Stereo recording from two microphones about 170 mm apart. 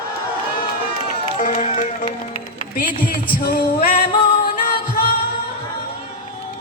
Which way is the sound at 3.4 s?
60° left (ahead or behind).